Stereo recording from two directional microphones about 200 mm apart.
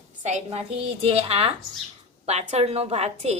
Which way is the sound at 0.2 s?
35° right (ahead or behind).